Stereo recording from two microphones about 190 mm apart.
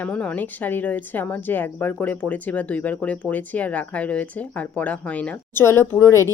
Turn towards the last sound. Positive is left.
turn(degrees=15)  # may be behind; listen again after turning